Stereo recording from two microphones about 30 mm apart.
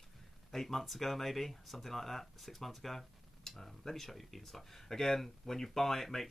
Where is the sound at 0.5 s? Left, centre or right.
Centre.